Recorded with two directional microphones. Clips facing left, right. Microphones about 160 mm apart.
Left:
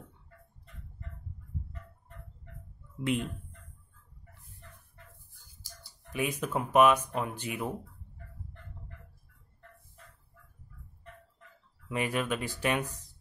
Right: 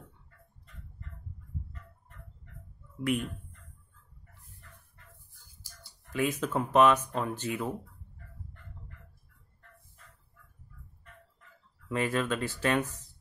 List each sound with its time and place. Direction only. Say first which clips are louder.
3.0 s speech: right 1 dB; 25° left (ahead or behind)
6.1 s speech: right 2 dB; 15° left (ahead or behind)
11.9 s speech: right 2 dB; 15° left (ahead or behind)